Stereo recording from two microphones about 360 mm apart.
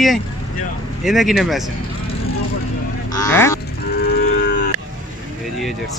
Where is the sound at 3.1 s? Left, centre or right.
Centre.